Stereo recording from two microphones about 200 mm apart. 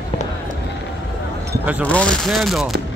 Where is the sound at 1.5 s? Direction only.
10° right (ahead or behind).